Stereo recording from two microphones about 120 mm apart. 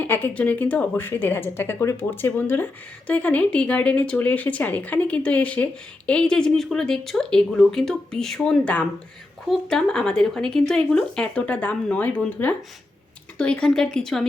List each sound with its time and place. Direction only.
0.0 s speech: 15° left (ahead or behind)